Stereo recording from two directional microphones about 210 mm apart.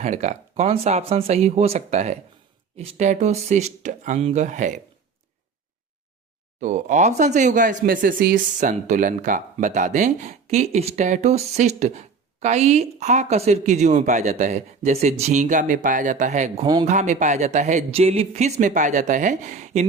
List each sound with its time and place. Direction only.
0.0 s speech: 35° right (ahead or behind)
6.6 s speech: 35° right (ahead or behind)